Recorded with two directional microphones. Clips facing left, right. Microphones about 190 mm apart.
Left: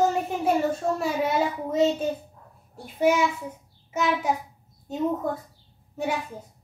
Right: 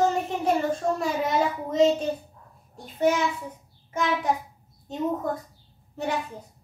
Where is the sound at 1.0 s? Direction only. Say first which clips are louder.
Left 2 dB; 5° left (ahead or behind).